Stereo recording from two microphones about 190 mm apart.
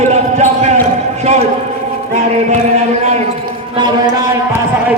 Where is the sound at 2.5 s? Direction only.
35° right (ahead or behind).